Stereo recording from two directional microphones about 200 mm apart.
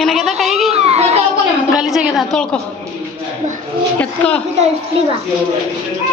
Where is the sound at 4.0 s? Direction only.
10° left (ahead or behind).